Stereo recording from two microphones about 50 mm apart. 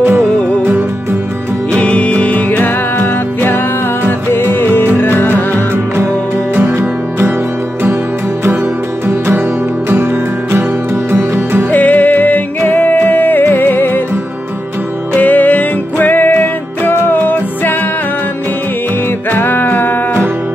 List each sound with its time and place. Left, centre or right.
0.4 s music: left
1.8 s music: left
6.8 s music: right
9.8 s music: right
11.7 s music: left
15.1 s music: left
19.3 s music: left